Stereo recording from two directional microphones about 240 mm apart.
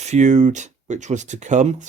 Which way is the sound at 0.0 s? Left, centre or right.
Right.